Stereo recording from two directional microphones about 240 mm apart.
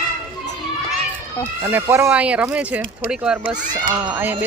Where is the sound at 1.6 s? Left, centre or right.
Centre.